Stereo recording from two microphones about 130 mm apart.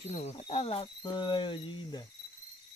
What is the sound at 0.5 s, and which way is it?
Cricket, 45° left (ahead or behind).